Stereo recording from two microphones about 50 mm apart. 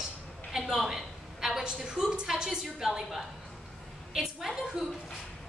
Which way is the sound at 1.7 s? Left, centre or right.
Centre.